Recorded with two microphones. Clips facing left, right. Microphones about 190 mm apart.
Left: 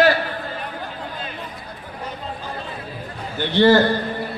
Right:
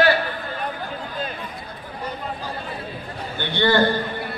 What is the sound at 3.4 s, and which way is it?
Speech, 35° left (ahead or behind).